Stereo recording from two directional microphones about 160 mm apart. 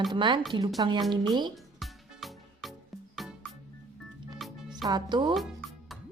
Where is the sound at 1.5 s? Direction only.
Centre (ahead or behind).